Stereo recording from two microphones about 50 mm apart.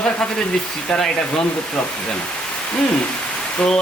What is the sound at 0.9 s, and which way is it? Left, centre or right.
Speech, centre.